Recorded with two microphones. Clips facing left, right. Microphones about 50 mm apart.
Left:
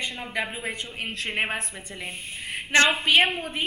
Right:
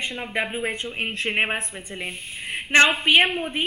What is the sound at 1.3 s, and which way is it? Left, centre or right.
Speech, centre.